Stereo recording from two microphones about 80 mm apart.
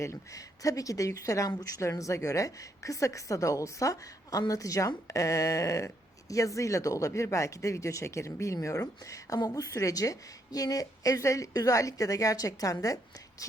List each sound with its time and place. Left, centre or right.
0.0 s speech: left
9.4 s a woman's voice: left
9.6 s speech: left